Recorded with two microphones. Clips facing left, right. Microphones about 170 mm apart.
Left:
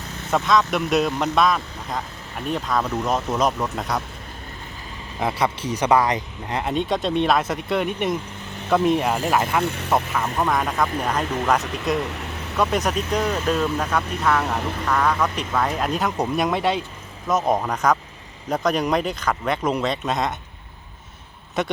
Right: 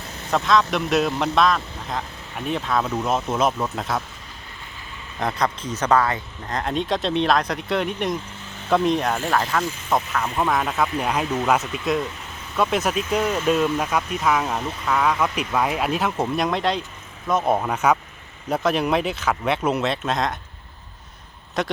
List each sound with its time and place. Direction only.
0.3 s speech: centre (ahead or behind)
5.2 s speech: 10° left (ahead or behind)
9.6 s speech: 65° left (ahead or behind)
9.9 s speech: 5° left (ahead or behind)